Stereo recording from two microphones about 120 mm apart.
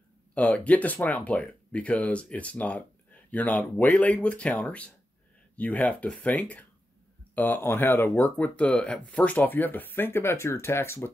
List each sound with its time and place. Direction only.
0.3 s speech: 10° left (ahead or behind)